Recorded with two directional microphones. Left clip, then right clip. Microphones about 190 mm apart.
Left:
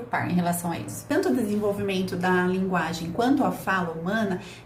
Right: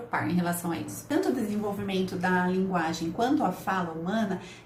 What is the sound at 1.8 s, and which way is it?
A woman's voice, 20° left (ahead or behind).